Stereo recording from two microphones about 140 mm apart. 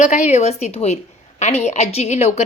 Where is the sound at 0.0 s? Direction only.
55° left (ahead or behind).